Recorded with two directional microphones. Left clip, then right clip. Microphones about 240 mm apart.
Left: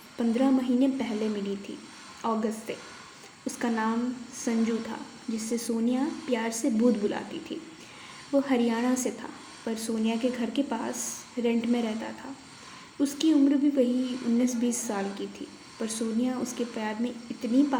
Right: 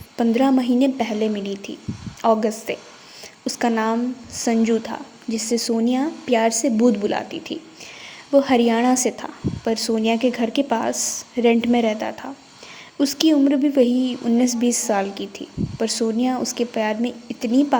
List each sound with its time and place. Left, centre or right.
0.2 s a woman's voice: right